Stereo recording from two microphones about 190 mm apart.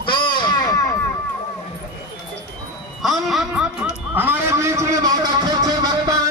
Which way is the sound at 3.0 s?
Centre (ahead or behind).